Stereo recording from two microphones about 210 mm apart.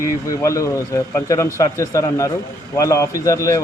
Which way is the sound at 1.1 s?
15° left (ahead or behind).